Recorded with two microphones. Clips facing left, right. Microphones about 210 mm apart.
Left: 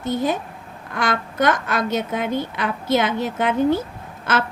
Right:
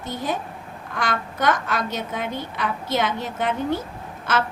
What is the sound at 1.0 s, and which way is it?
A woman's voice, 55° left (ahead or behind).